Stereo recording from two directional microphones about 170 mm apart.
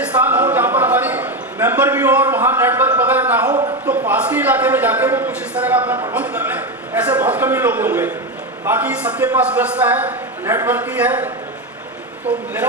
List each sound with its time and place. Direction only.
0.0 s a sound: 10° right (ahead or behind)
2.3 s a man's voice: 10° right (ahead or behind)
3.5 s a man's voice: 25° right (ahead or behind)
3.8 s a man's voice: 10° right (ahead or behind)